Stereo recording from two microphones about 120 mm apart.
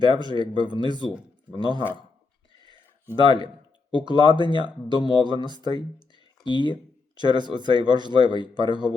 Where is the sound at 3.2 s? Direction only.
45° right (ahead or behind).